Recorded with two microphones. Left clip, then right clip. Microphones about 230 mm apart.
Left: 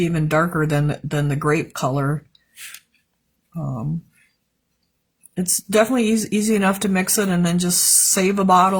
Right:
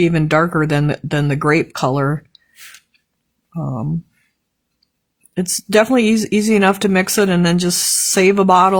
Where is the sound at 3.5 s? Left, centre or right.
Right.